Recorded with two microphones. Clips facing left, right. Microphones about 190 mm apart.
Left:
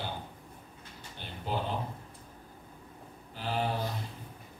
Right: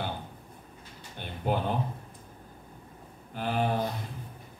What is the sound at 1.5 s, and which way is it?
Mantra, 55° right (ahead or behind).